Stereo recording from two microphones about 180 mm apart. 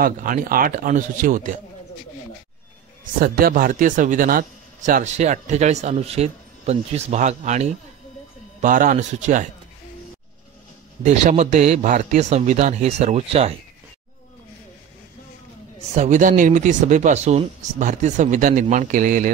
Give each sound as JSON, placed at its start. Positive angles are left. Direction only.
{"t": 0.0, "sound": "speech", "side_deg": -50}
{"t": 3.2, "sound": "speech", "side_deg": -55}
{"t": 11.1, "sound": "speech", "side_deg": -40}
{"t": 15.9, "sound": "speech", "side_deg": -40}